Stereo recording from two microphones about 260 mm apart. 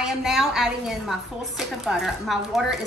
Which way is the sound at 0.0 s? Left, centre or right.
Centre.